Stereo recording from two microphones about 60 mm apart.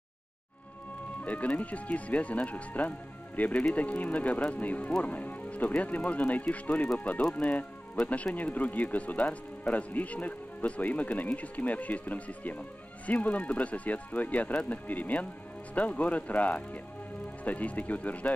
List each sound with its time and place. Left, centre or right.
1.2 s speech: left